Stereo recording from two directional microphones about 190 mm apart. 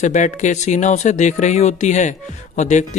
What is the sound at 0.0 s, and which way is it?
Speech, 40° left (ahead or behind).